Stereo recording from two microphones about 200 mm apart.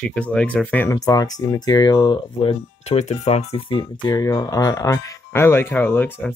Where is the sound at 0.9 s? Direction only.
20° left (ahead or behind).